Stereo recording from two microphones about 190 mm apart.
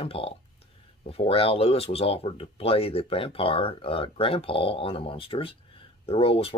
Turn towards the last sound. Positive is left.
turn(degrees=30)  # may be behind; listen again after turning